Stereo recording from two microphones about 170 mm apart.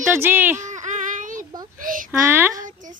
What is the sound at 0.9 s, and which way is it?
Child singing, 45° right (ahead or behind).